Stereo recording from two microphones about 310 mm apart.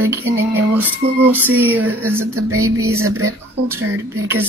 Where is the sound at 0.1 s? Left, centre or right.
Centre.